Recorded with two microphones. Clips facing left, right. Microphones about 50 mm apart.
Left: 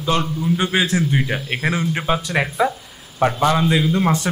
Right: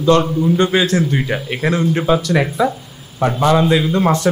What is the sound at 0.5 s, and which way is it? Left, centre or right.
Speech, centre.